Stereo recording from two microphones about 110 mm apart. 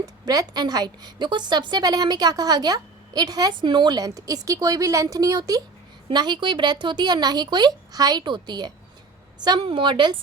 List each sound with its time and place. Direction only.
0.0 s a woman's voice: 35° right (ahead or behind)